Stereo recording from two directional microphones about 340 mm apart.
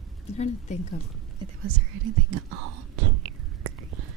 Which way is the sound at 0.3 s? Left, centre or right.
Centre.